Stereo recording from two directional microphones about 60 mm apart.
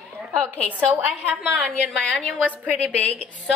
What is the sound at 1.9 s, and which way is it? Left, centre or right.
Speech, centre.